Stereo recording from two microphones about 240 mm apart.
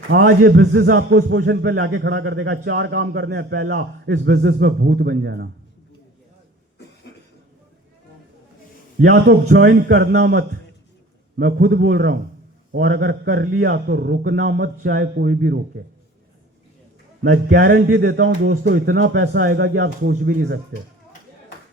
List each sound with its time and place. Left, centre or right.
0.3 s a man's voice: right
9.1 s speech: right
17.2 s speech: right